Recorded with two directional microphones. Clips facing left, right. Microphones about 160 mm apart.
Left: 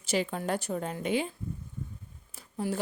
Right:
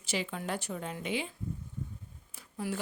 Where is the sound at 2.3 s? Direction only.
35° left (ahead or behind).